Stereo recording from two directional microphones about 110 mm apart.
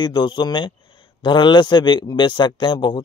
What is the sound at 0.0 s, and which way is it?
Speech, 45° left (ahead or behind).